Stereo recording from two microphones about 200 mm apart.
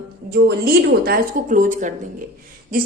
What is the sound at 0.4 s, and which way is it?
A woman's voice, 50° right (ahead or behind).